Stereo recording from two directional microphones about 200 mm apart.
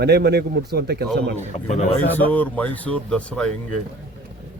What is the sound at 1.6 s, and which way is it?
Speech, 35° left (ahead or behind).